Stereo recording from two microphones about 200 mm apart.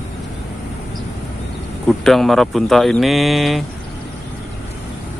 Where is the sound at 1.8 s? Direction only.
Centre (ahead or behind).